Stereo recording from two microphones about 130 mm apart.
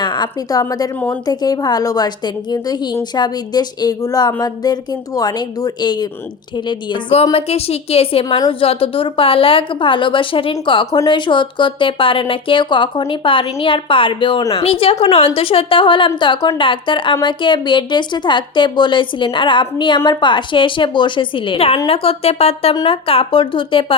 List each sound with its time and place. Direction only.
0.0 s a woman's voice: 35° left (ahead or behind)
0.9 s a woman's voice: 10° left (ahead or behind)
1.2 s a woman's voice: 30° left (ahead or behind); by 8.2 s 50° left (ahead or behind)
8.2 s a woman's voice: 40° left (ahead or behind)
22.7 s a woman's voice: 40° left (ahead or behind)